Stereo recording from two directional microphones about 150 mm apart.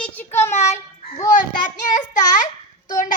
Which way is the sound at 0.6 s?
50° left (ahead or behind).